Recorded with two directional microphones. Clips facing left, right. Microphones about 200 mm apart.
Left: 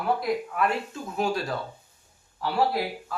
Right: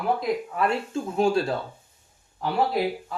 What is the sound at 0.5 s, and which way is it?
Speech, 30° right (ahead or behind).